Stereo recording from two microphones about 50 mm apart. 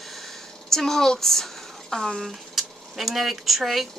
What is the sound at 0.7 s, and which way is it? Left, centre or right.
A woman's voice, centre.